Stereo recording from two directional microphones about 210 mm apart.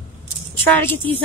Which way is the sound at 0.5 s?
10° left (ahead or behind).